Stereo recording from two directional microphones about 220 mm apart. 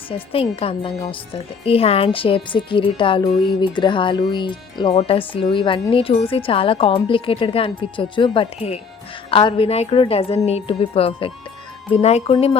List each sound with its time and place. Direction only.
0.1 s speech: 25° left (ahead or behind)